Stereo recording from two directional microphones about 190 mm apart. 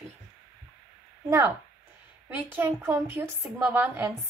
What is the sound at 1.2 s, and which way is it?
A woman's voice, 15° right (ahead or behind).